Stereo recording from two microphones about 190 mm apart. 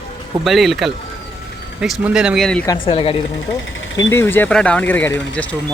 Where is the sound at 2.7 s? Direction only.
30° left (ahead or behind).